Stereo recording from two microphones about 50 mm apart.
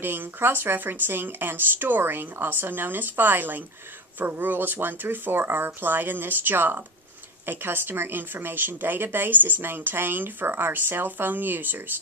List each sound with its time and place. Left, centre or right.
0.0 s speech: right